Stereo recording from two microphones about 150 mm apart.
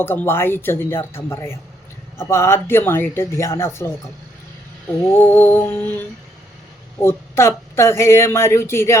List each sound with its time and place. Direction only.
0.0 s speech: 15° left (ahead or behind)
5.0 s speech: 15° left (ahead or behind)
7.0 s speech: 15° left (ahead or behind)